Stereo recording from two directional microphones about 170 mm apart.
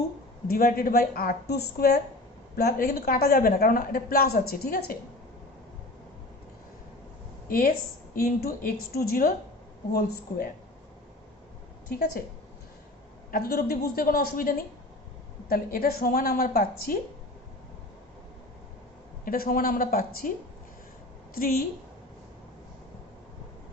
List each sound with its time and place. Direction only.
0.4 s a woman's voice: 60° left (ahead or behind)
7.4 s a woman's voice: 55° left (ahead or behind)
11.9 s a woman's voice: 65° left (ahead or behind)
13.3 s a woman's voice: 60° left (ahead or behind)
19.2 s a woman's voice: 55° left (ahead or behind)
21.3 s a woman's voice: 60° left (ahead or behind)